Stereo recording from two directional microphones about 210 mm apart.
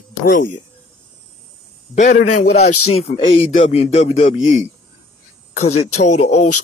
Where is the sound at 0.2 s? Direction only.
45° left (ahead or behind).